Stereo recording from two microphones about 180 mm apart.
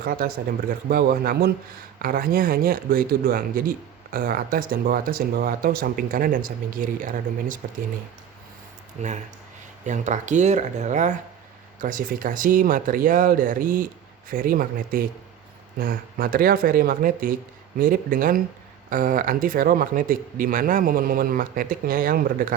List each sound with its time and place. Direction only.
0.0 s a man's voice: 55° right (ahead or behind)
9.0 s speech: 40° right (ahead or behind)